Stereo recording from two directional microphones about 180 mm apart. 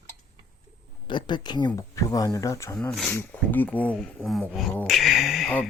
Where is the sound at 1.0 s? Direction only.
25° left (ahead or behind).